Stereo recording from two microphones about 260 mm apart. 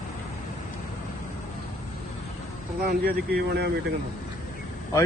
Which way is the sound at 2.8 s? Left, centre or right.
Right.